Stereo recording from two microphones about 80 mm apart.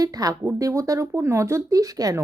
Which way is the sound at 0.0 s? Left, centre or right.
Right.